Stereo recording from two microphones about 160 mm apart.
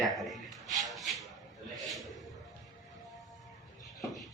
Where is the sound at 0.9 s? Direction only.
Centre (ahead or behind).